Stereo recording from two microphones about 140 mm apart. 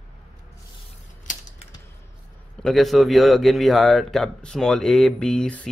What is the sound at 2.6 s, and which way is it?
A man's voice, centre (ahead or behind).